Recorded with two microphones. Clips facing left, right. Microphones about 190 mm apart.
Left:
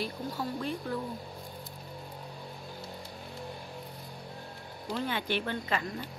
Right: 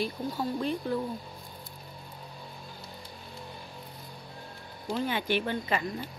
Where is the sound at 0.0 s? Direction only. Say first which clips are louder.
Right 3 dB; 20° right (ahead or behind).